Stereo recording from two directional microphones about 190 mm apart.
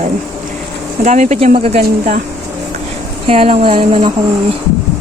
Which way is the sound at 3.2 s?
30° right (ahead or behind).